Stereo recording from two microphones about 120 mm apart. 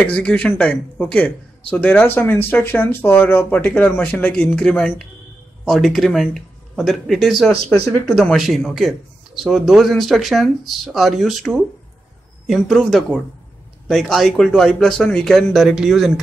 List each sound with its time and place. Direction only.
0.0 s a man's voice: 10° left (ahead or behind)